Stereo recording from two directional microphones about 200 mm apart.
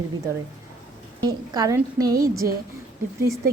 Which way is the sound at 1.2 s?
20° right (ahead or behind).